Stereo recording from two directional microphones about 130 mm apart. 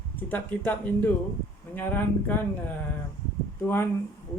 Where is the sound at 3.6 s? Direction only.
15° left (ahead or behind).